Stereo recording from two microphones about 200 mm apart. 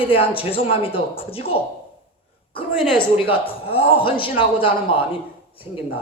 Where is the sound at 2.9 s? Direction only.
25° left (ahead or behind).